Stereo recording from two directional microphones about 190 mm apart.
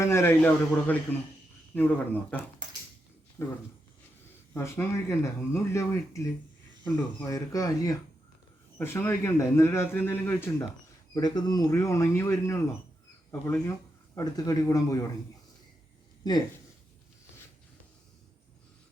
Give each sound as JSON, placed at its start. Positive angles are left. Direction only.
{"t": 0.0, "sound": "a man's voice", "side_deg": 15}